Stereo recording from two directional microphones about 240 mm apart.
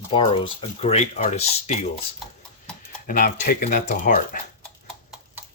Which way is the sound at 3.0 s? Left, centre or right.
Left.